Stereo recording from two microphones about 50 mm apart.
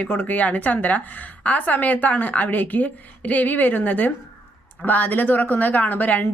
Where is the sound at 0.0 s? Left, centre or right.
Left.